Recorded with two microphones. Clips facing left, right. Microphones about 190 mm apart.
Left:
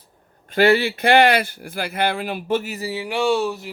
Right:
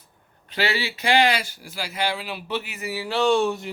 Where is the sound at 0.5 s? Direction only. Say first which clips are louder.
Left 10 dB; 50° left (ahead or behind).